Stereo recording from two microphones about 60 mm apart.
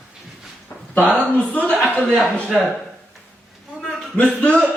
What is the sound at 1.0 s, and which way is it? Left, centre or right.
Speech, left.